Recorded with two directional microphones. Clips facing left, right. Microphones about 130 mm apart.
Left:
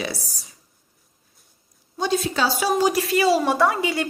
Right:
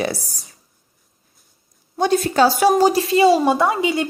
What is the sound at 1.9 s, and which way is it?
Speech, 55° right (ahead or behind).